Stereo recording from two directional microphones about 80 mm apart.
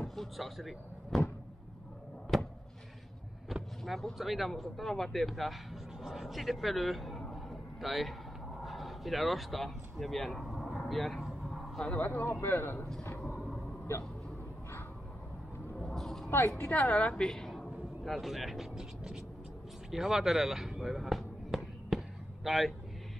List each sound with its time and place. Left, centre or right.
0.0 s speech: centre
2.3 s a sound: centre
3.4 s speech: centre
8.6 s a sound: centre
11.8 s a woman's voice: centre
15.7 s a sound: centre
16.3 s a woman's voice: left
17.2 s speech: centre
19.9 s basketball bounce: centre